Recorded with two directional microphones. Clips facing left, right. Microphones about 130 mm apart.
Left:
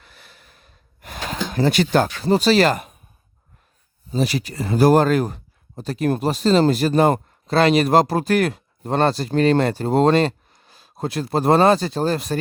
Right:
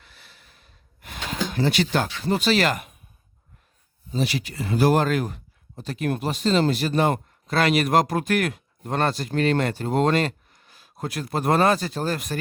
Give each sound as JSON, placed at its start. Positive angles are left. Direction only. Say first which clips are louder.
{"t": 0.0, "sound": "a sound", "louder": "left 4 dB", "side_deg": 50}
{"t": 1.5, "sound": "speech", "louder": "left 5 dB", "side_deg": 40}
{"t": 4.1, "sound": "speech", "louder": "left 4 dB", "side_deg": 40}